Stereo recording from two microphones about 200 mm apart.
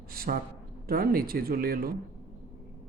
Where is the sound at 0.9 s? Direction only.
50° right (ahead or behind).